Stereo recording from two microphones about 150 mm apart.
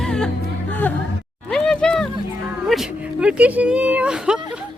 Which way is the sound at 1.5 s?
5° left (ahead or behind).